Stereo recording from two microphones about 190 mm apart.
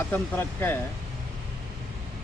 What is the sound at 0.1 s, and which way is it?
Speech, 10° left (ahead or behind).